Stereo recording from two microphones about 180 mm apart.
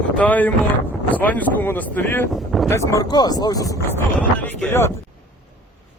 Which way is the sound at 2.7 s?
15° left (ahead or behind).